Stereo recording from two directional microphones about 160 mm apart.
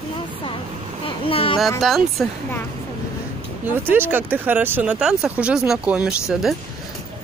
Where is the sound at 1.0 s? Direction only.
35° left (ahead or behind).